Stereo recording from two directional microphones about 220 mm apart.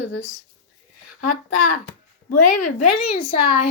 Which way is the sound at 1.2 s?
90° left.